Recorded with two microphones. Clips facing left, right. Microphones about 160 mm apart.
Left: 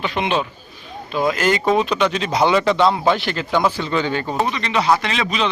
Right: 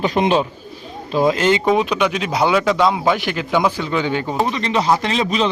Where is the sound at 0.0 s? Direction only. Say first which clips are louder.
Right 5 dB; 40° right (ahead or behind).